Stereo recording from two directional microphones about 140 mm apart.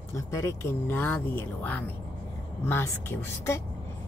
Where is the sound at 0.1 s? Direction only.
20° left (ahead or behind).